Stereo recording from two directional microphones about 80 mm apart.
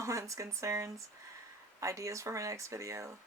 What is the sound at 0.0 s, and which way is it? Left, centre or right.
Speech, right.